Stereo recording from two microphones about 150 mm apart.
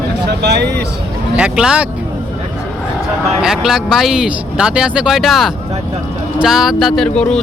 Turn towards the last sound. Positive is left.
turn(degrees=5)  # may be behind; listen again after turning